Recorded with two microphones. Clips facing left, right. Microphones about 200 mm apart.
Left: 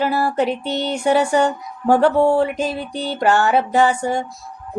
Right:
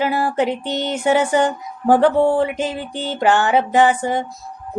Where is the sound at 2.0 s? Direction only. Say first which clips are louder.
Even; 15° right (ahead or behind).